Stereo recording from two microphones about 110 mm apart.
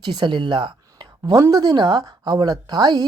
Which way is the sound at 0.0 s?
45° right (ahead or behind).